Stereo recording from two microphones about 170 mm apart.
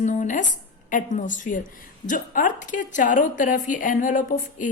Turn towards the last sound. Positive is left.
turn(degrees=50)  # may be behind; listen again after turning